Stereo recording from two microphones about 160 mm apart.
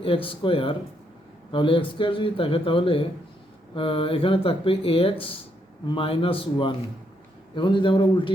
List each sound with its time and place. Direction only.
0.0 s speech: 35° left (ahead or behind)